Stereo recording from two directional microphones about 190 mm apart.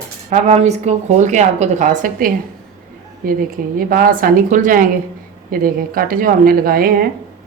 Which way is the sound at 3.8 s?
50° right (ahead or behind).